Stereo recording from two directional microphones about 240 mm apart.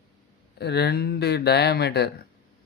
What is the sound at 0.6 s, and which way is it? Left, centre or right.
Speech, left.